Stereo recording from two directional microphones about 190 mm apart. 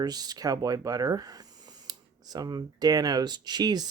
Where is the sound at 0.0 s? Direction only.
20° right (ahead or behind).